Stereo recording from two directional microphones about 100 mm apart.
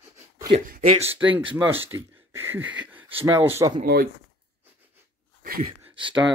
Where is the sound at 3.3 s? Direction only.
30° right (ahead or behind).